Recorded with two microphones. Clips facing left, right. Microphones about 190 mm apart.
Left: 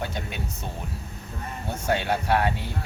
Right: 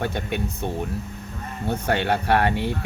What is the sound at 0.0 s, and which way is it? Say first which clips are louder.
Speech: right 6 dB; 60° right (ahead or behind).